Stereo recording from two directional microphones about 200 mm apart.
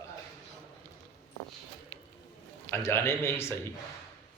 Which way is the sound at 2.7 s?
15° left (ahead or behind).